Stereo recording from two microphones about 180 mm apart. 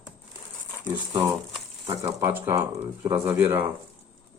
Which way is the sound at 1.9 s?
25° right (ahead or behind).